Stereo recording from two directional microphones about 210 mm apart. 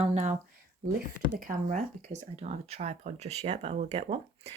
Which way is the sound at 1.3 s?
40° right (ahead or behind).